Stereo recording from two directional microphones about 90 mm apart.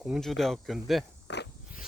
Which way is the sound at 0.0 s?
Centre (ahead or behind).